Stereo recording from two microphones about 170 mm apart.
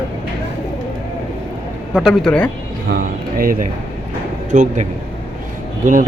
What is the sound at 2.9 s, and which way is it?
A man's voice, 55° right (ahead or behind).